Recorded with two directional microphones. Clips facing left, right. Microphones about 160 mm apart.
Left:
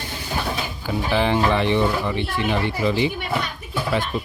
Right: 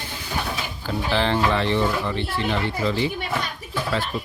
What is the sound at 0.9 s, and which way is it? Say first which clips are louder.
Speech: left 2 dB; 10° left (ahead or behind).